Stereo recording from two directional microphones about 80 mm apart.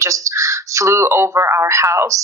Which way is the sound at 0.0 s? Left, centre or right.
Right.